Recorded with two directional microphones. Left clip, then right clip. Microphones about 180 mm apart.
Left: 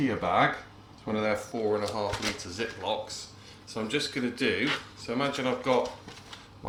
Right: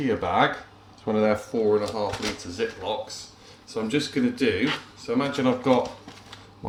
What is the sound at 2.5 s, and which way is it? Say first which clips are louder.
Speech: right 4 dB; 40° left (ahead or behind).